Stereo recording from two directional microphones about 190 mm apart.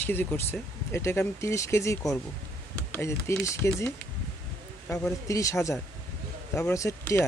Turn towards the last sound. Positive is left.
turn(degrees=15)  # may be behind; listen again after turning